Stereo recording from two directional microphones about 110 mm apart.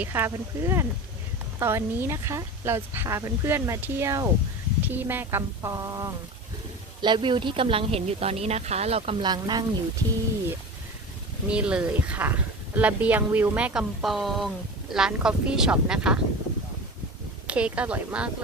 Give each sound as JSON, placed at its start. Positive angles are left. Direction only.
{"t": 0.0, "sound": "speech", "side_deg": -20}
{"t": 4.8, "sound": "speech", "side_deg": -15}
{"t": 7.0, "sound": "speech", "side_deg": -45}
{"t": 9.2, "sound": "speech", "side_deg": -40}
{"t": 11.4, "sound": "speech", "side_deg": -10}
{"t": 17.4, "sound": "speech", "side_deg": -10}